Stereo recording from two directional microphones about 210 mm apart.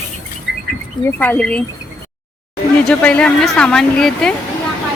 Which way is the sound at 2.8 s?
5° left (ahead or behind).